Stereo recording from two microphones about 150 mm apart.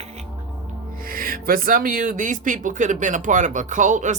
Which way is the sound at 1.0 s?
70° right (ahead or behind).